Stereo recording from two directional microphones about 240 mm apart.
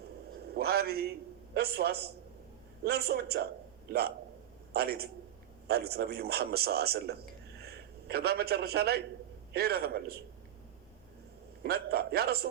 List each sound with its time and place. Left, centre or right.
0.5 s a sound: right
1.5 s a man's voice: right
4.7 s a man's voice: right
11.6 s a man's voice: right